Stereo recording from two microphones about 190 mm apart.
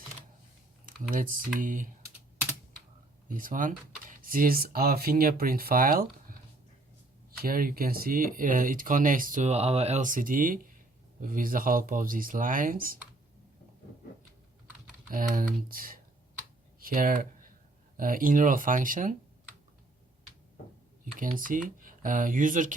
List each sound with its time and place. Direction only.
0.9 s speech: 45° right (ahead or behind)
3.2 s speech: 45° right (ahead or behind)
7.4 s speech: 50° right (ahead or behind)
15.1 s speech: 45° right (ahead or behind)
21.2 s speech: 45° right (ahead or behind)